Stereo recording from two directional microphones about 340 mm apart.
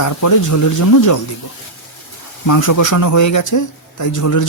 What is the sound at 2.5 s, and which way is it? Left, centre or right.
A man's voice, left.